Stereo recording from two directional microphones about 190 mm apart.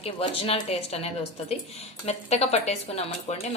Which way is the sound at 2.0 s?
35° left (ahead or behind).